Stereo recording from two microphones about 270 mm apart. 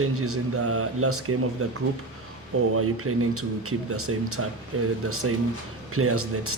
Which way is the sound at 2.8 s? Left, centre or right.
Right.